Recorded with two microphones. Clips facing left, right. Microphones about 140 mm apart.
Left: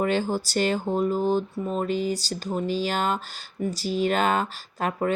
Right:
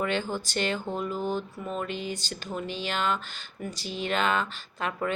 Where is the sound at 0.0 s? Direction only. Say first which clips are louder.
Left 5 dB; 40° left (ahead or behind).